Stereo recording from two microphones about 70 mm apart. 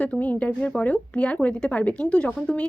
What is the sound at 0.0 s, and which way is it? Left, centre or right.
Speech, left.